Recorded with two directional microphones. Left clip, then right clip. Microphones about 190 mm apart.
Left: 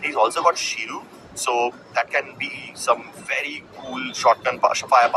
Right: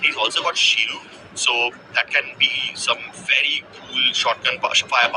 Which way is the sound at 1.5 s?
10° right (ahead or behind).